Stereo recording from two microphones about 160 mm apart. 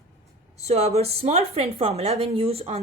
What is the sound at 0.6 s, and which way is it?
A woman's voice, 40° right (ahead or behind).